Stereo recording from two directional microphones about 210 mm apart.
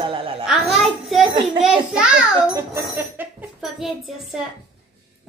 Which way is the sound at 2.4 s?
15° right (ahead or behind).